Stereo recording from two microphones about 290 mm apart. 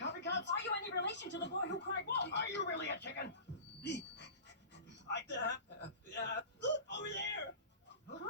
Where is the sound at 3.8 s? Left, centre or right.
Left.